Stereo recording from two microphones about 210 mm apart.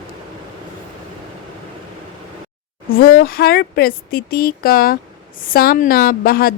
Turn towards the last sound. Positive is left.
turn(degrees=45)  # may be behind; listen again after turning